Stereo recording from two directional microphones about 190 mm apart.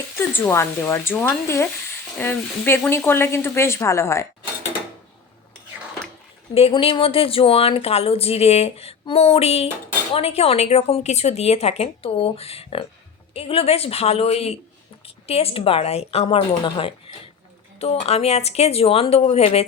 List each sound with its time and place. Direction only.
0.2 s speech: 10° left (ahead or behind)
6.5 s speech: 30° left (ahead or behind)